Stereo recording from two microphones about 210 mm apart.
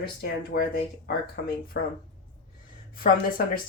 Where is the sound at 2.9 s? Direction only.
45° left (ahead or behind).